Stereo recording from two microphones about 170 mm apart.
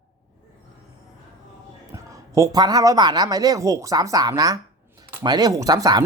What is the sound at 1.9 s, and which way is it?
Speech, 20° right (ahead or behind).